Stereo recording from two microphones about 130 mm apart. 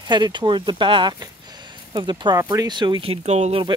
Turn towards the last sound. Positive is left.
turn(degrees=-60)  # may be behind; listen again after turning